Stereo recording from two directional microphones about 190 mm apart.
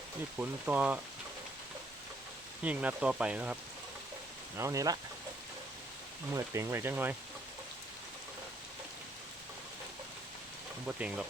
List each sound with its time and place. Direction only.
0.3 s speech: 10° right (ahead or behind)
2.6 s speech: 5° right (ahead or behind)
6.3 s speech: 15° right (ahead or behind)
10.8 s speech: 5° right (ahead or behind)